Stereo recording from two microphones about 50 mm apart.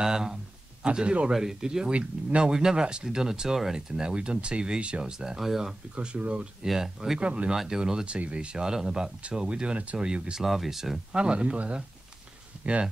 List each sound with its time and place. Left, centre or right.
0.0 s speech: centre
1.9 s speech: right
5.2 s speech: centre
5.9 s speech: right
6.6 s speech: centre
7.2 s speech: right
7.5 s speech: centre
10.4 s speech: centre
11.1 s speech: right